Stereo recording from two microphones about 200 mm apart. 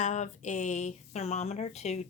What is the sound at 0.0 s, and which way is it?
Speech, 35° left (ahead or behind).